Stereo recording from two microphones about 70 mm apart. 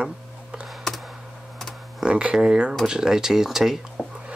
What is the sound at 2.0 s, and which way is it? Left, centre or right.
Speech, centre.